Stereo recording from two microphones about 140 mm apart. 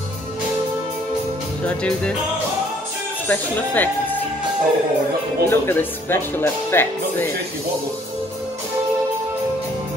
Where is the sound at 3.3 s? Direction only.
15° left (ahead or behind).